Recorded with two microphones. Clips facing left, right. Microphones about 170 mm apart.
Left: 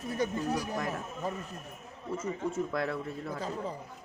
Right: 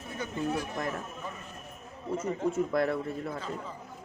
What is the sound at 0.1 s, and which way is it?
Speech, 35° left (ahead or behind).